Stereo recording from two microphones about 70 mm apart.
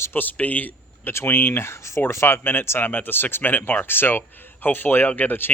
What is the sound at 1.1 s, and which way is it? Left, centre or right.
Speech, left.